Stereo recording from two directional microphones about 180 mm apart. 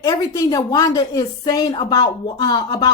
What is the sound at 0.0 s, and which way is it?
A man's voice, 20° left (ahead or behind).